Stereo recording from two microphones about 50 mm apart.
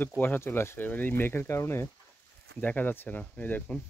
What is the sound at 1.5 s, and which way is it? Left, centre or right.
Speech, left.